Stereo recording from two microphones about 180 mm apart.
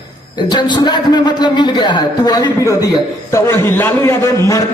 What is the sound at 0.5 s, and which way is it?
A man's voice, 25° left (ahead or behind).